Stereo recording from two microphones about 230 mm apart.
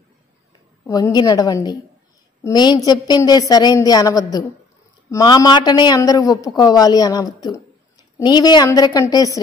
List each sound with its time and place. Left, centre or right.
0.8 s a man's voice: centre